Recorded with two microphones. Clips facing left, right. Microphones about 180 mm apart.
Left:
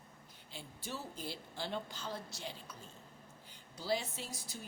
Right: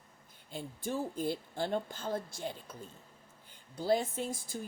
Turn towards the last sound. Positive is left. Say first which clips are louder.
# right 9 dB
turn(degrees=-50)  # may be behind; listen again after turning